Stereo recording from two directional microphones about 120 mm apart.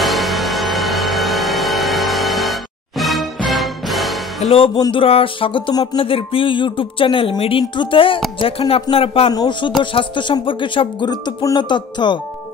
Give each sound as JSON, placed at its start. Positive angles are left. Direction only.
{"t": 0.0, "sound": "music", "side_deg": 0}
{"t": 4.5, "sound": "a sound", "side_deg": 50}
{"t": 9.3, "sound": "speech", "side_deg": 35}